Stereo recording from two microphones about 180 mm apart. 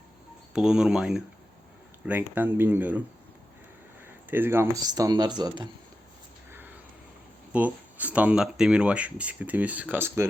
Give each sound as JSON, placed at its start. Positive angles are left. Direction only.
{"t": 0.5, "sound": "speech", "side_deg": -5}
{"t": 4.0, "sound": "speech", "side_deg": -10}
{"t": 7.5, "sound": "speech", "side_deg": -10}